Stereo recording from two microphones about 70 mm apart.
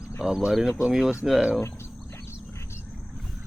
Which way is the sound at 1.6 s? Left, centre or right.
Left.